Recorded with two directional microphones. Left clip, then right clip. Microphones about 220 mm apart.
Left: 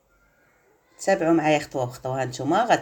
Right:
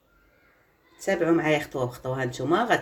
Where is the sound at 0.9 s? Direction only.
30° left (ahead or behind).